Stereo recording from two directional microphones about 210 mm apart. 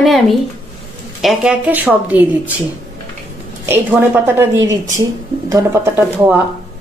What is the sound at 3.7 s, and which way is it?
Speech, 10° right (ahead or behind).